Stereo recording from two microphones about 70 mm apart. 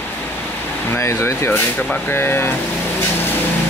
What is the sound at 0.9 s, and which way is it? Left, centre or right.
Speech, left.